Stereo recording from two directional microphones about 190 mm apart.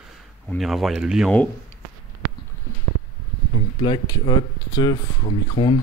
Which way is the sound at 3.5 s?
25° left (ahead or behind).